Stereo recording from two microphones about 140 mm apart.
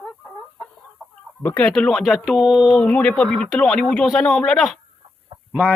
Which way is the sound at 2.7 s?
10° left (ahead or behind).